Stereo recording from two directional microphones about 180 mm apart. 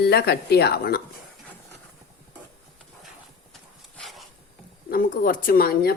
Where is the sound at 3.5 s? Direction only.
Centre (ahead or behind).